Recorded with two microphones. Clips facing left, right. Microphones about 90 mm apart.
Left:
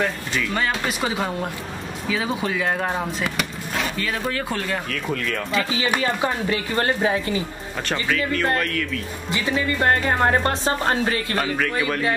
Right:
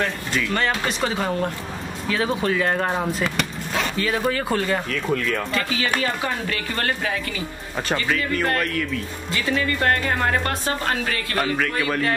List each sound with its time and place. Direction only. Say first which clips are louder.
0.3 s speech: right 1 dB; 5° left (ahead or behind)
5.8 s speech: left 3 dB; 20° left (ahead or behind)
8.5 s speech: even; 5° right (ahead or behind)
9.3 s speech: even; 20° left (ahead or behind)